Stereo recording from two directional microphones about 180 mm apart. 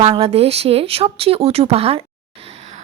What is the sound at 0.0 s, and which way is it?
Speech, 35° right (ahead or behind).